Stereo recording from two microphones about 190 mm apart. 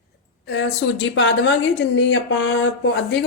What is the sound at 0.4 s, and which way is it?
A woman's voice, 65° left (ahead or behind).